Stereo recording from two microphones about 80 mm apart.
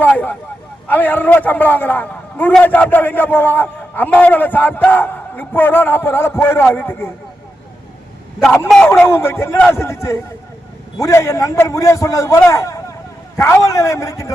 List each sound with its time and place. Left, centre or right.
0.0 s a man's voice: left
9.0 s a man's voice: left